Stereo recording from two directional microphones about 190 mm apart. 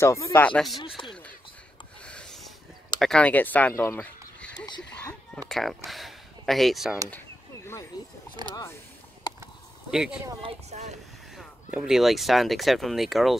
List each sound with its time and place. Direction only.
0.0 s speech: 15° left (ahead or behind)
0.7 s speech: 25° left (ahead or behind)
2.0 s filing: 5° left (ahead or behind)
3.0 s speech: 5° left (ahead or behind)
5.9 s a sound: centre (ahead or behind)
7.1 s a sound: 10° left (ahead or behind)
8.4 s speech: 25° right (ahead or behind)
9.3 s a sound: 20° left (ahead or behind)
9.8 s speech: 5° right (ahead or behind)
10.4 s speech: 35° right (ahead or behind)
11.3 s speech: 5° right (ahead or behind)